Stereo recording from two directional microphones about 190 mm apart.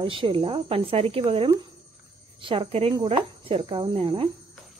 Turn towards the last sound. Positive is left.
turn(degrees=-25)  # may be behind; listen again after turning